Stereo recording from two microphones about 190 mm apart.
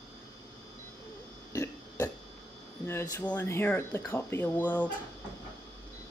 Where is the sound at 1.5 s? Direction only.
15° left (ahead or behind).